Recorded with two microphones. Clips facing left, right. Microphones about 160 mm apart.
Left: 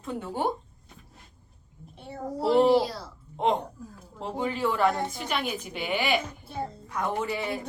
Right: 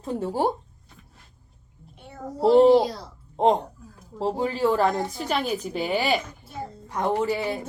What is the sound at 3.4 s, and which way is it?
Speech, 35° right (ahead or behind).